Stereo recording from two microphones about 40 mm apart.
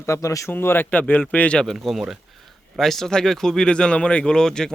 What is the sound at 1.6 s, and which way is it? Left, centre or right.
A man's voice, centre.